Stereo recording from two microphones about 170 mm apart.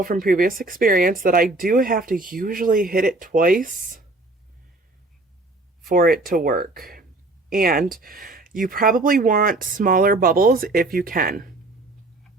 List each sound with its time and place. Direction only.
0.0 s speech: 55° right (ahead or behind)
5.9 s speech: 60° right (ahead or behind)